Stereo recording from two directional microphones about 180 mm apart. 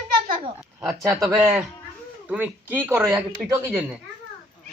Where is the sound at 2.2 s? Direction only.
10° right (ahead or behind).